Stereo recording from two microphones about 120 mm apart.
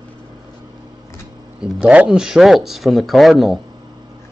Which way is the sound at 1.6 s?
10° right (ahead or behind).